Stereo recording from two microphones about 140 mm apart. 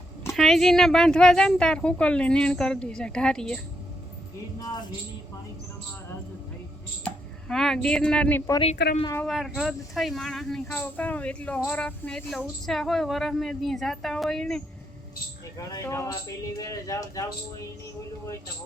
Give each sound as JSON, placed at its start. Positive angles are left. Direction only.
{"t": 0.3, "sound": "speech", "side_deg": 0}
{"t": 4.6, "sound": "speech", "side_deg": 30}
{"t": 7.0, "sound": "speech", "side_deg": 5}
{"t": 9.2, "sound": "speech", "side_deg": 0}
{"t": 15.5, "sound": "speech", "side_deg": 20}